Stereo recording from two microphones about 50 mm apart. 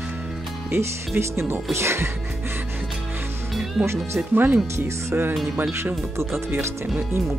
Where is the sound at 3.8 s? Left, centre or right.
Right.